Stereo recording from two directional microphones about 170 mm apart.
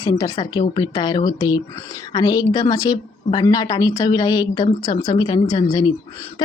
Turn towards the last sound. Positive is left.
turn(degrees=25)  # may be behind; listen again after turning